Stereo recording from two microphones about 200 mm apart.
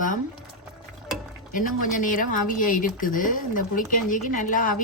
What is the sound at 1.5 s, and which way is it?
Speech, 40° left (ahead or behind).